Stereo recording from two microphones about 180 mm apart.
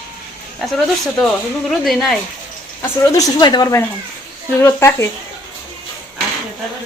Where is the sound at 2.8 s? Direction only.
20° left (ahead or behind).